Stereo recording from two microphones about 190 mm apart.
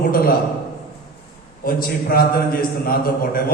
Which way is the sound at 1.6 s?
50° left (ahead or behind).